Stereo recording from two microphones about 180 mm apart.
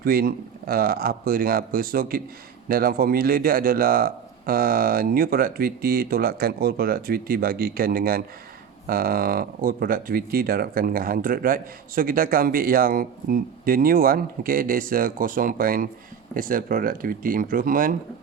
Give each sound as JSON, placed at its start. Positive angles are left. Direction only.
{"t": 0.0, "sound": "speech", "side_deg": -55}